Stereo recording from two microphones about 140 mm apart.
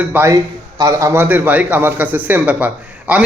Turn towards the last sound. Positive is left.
turn(degrees=-10)  # may be behind; listen again after turning